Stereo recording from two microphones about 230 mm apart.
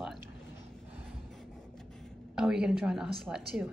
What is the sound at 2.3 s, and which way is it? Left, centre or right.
A woman's voice, centre.